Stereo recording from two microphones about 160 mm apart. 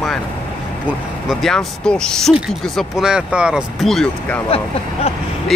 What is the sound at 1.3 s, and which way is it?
Speech, centre (ahead or behind).